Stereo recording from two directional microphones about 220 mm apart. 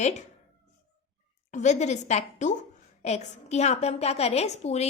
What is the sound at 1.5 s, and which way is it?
A woman's voice, 30° left (ahead or behind).